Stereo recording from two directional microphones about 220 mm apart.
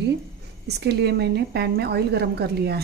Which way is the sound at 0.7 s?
50° right (ahead or behind).